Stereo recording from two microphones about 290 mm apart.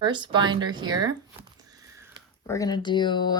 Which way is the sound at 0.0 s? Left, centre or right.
Centre.